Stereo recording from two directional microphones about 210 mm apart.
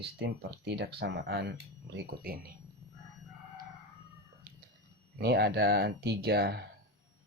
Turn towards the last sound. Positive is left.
turn(degrees=-50)  # may be behind; listen again after turning